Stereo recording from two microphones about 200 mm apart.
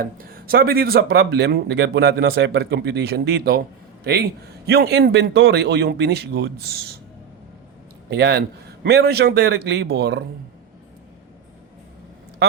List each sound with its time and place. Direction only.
0.0 s speech: 45° right (ahead or behind)
8.1 s a man's voice: 55° right (ahead or behind)